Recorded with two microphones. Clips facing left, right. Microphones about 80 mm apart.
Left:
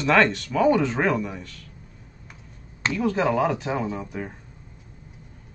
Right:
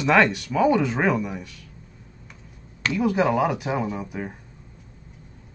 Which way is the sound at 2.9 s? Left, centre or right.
Centre.